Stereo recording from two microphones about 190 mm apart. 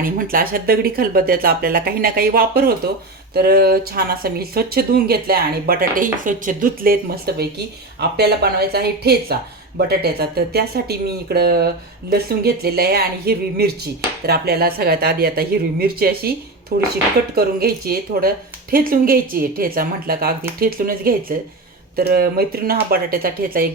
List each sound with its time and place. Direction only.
0.0 s speech: 50° right (ahead or behind)